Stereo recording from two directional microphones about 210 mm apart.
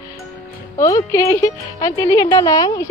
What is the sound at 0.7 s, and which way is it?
Speech, 15° left (ahead or behind).